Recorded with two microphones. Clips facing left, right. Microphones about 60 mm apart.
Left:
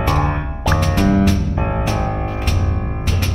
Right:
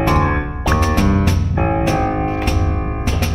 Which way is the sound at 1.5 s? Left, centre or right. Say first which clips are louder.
Right 4 dB; right.